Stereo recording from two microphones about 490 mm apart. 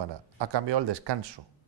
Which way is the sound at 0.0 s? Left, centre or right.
Right.